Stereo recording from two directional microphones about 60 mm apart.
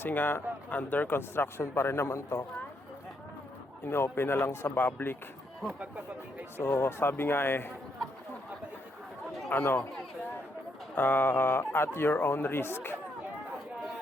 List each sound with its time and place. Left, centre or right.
0.0 s a man's voice: left
3.8 s speech: left
6.6 s speech: left
9.5 s speech: left
10.9 s speech: left